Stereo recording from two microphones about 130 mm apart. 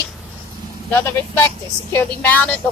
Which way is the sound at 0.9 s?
15° left (ahead or behind).